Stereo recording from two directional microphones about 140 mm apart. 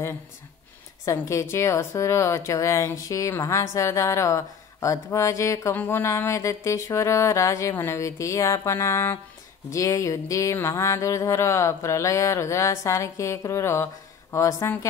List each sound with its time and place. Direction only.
1.0 s a woman's voice: 20° left (ahead or behind)